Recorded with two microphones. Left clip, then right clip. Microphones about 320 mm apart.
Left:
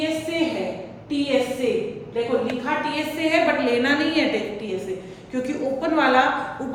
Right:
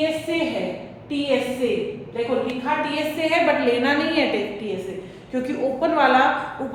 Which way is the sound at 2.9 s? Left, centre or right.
Centre.